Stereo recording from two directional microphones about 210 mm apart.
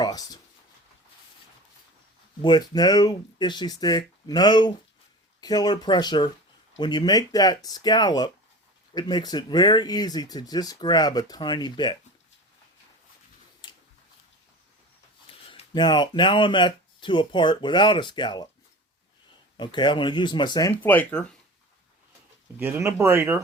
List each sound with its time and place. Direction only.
0.0 s speech: 20° left (ahead or behind)
2.4 s speech: 20° left (ahead or behind)
13.6 s a sound: 20° left (ahead or behind)
15.3 s speech: 25° left (ahead or behind)
19.5 s speech: 20° left (ahead or behind)
22.5 s speech: 10° right (ahead or behind)